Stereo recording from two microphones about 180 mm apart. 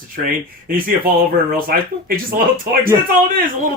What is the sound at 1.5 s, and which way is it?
Speech, 55° right (ahead or behind).